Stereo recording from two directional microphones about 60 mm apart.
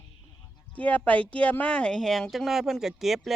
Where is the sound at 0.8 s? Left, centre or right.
Left.